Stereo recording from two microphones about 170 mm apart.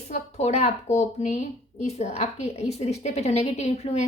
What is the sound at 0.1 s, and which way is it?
A woman's voice, 40° left (ahead or behind).